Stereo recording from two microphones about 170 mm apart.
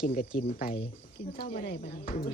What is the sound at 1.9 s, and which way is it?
Speech, 50° left (ahead or behind).